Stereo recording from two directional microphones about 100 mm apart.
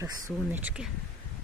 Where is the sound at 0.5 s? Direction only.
15° right (ahead or behind).